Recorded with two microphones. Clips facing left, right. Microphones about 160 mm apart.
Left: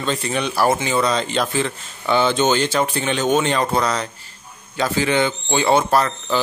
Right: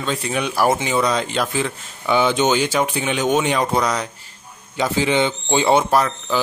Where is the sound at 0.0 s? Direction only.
5° right (ahead or behind).